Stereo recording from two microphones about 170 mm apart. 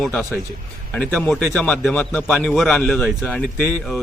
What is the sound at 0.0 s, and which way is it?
A man's voice, centre (ahead or behind).